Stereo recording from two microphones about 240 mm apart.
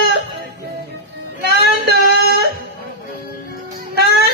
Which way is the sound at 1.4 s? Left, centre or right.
Right.